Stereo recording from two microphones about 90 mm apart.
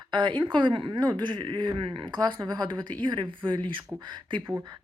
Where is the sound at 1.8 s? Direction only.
65° right (ahead or behind).